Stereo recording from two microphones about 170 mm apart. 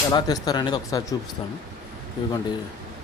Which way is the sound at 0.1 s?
25° left (ahead or behind).